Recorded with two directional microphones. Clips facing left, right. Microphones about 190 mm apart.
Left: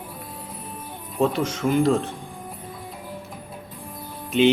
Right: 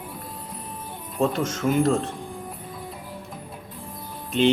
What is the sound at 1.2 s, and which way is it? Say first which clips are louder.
Speech: left 1 dB; centre (ahead or behind).